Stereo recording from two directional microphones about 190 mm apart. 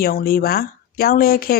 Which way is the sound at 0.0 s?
50° left (ahead or behind).